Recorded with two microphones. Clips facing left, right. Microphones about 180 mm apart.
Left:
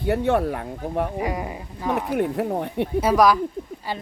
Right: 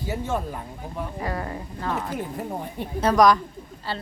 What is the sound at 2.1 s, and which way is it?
Speech, 65° left (ahead or behind).